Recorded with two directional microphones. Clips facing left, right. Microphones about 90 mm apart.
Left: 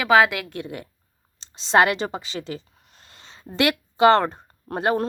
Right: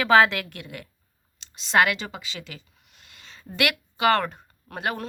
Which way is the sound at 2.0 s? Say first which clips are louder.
Left 8 dB; 35° left (ahead or behind).